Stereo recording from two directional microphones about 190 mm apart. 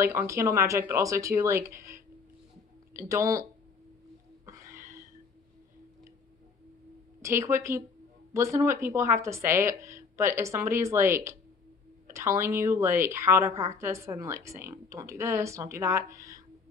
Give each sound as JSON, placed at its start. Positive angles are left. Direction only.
{"t": 0.0, "sound": "a woman's voice", "side_deg": -15}
{"t": 2.9, "sound": "speech", "side_deg": -15}
{"t": 4.5, "sound": "a sound", "side_deg": -15}
{"t": 7.2, "sound": "a woman's voice", "side_deg": -15}